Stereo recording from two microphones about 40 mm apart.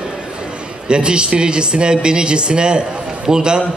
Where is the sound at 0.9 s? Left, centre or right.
Right.